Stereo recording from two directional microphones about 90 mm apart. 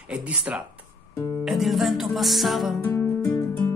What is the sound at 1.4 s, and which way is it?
Music, centre (ahead or behind).